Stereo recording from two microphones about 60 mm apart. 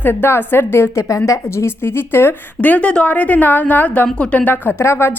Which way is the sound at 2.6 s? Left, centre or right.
Left.